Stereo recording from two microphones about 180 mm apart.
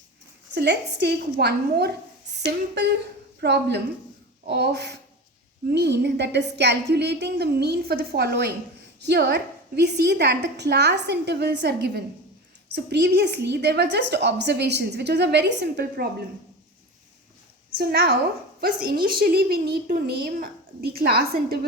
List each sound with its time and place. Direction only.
0.5 s a woman's voice: 65° right (ahead or behind)
3.4 s a woman's voice: 65° right (ahead or behind)
17.7 s a woman's voice: 55° right (ahead or behind)